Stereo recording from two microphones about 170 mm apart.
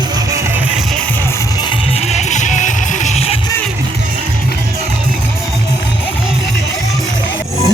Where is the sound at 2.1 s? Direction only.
45° left (ahead or behind).